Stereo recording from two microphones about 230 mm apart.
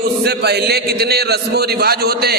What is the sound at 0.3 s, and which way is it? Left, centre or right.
A man's voice, right.